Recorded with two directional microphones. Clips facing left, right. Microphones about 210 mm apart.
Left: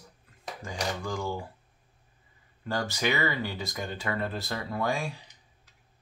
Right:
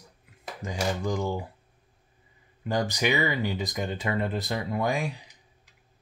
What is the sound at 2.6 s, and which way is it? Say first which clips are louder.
Speech: right 3 dB; 15° right (ahead or behind).